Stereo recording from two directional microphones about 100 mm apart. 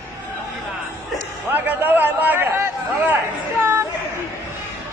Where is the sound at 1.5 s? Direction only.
20° right (ahead or behind).